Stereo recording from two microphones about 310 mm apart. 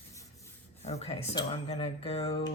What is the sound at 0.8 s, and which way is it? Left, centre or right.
Speech, centre.